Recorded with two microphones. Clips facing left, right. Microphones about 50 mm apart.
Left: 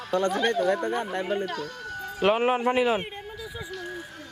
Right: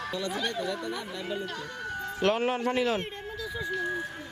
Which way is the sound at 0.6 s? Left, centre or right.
Left.